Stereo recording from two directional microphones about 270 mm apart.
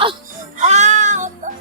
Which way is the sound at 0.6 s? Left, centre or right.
Right.